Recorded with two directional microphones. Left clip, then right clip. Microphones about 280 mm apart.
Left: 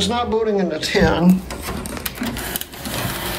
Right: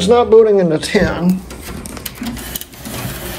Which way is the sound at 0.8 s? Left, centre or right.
Centre.